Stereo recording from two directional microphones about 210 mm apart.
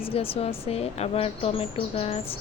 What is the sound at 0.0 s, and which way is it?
Speech, 25° left (ahead or behind).